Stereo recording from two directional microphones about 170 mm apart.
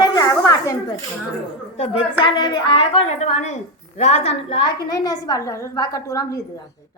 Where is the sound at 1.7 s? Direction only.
35° left (ahead or behind); by 6.4 s 20° left (ahead or behind).